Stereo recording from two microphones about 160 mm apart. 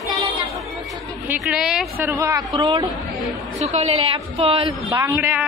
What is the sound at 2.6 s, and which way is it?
Speech, 30° right (ahead or behind).